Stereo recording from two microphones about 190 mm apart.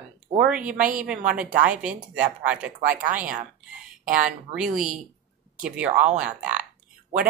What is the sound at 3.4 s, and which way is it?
Speech, 5° right (ahead or behind).